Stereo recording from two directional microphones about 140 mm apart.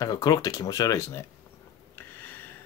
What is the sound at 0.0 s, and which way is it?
Speech, 25° left (ahead or behind).